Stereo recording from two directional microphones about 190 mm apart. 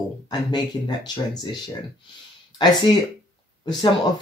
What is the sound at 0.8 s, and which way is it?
Speech, 20° left (ahead or behind).